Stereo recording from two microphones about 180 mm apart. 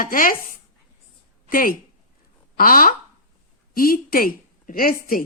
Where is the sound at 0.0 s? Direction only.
50° left (ahead or behind).